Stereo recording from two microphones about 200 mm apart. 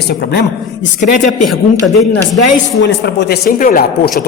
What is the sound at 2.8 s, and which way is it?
Speech, 60° left (ahead or behind).